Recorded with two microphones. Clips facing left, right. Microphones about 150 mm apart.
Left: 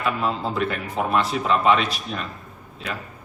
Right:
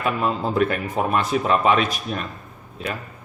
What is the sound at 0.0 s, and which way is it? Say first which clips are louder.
Speech: right 2 dB; 50° right (ahead or behind).